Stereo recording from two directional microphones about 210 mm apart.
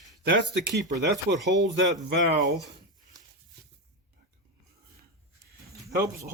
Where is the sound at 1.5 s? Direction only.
60° right (ahead or behind).